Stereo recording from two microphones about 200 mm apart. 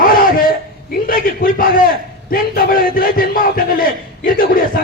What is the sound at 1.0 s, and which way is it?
A man's voice, 45° left (ahead or behind).